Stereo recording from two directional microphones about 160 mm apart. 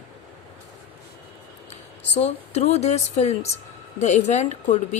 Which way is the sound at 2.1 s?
40° left (ahead or behind).